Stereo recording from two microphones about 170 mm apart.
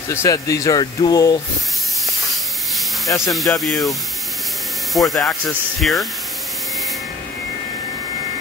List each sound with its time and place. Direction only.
0.1 s speech: 20° left (ahead or behind)
3.3 s speech: centre (ahead or behind)
4.9 s speech: centre (ahead or behind)